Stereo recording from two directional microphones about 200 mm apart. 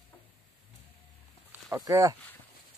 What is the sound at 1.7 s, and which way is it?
Speech, 15° right (ahead or behind).